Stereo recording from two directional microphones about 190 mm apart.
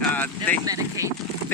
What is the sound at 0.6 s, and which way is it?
Speech, 15° right (ahead or behind).